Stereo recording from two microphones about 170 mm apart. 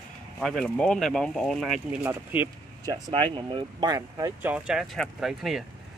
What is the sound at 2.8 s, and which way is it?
Speech, 25° right (ahead or behind).